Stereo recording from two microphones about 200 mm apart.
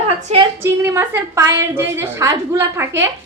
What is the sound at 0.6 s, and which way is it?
A woman's voice, 15° right (ahead or behind).